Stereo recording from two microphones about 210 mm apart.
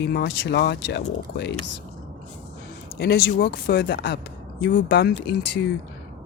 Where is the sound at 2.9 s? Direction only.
50° left (ahead or behind).